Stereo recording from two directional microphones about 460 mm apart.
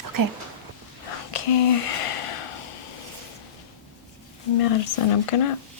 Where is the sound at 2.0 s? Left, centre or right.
Left.